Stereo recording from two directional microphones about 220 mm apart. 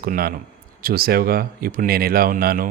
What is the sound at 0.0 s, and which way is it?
A man's voice, 40° right (ahead or behind).